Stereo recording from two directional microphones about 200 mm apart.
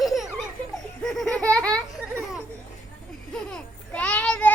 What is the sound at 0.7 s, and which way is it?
Laughter, centre (ahead or behind).